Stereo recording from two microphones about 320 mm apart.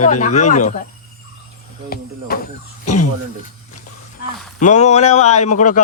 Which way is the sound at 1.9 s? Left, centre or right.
Left.